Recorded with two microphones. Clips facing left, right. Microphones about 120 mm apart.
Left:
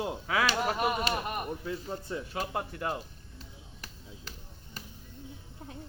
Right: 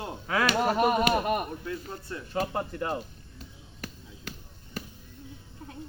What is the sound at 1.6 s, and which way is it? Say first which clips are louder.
Speech: even; 15° left (ahead or behind).